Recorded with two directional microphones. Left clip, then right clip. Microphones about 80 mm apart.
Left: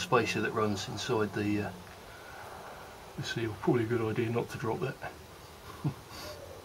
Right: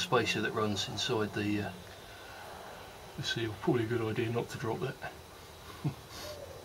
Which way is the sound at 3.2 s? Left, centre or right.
Right.